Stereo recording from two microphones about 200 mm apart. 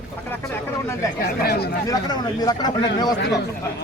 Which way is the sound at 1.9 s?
20° left (ahead or behind).